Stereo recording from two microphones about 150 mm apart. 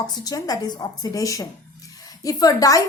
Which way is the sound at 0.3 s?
25° left (ahead or behind).